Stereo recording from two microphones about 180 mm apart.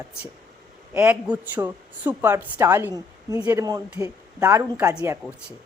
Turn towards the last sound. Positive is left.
turn(degrees=-15)  # may be behind; listen again after turning